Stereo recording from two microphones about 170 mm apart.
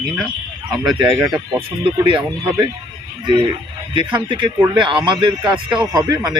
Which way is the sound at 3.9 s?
30° right (ahead or behind).